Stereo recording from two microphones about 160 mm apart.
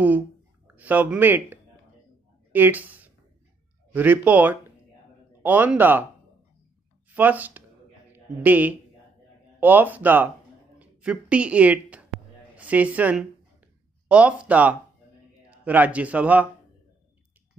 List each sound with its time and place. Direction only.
0.7 s speech: 10° right (ahead or behind)
7.1 s a man's voice: 10° right (ahead or behind)
10.8 s a sound: 5° right (ahead or behind)
12.5 s speech: 10° right (ahead or behind)